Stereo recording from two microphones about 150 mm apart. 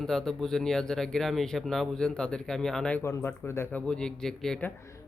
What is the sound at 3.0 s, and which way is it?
Speech, 15° left (ahead or behind).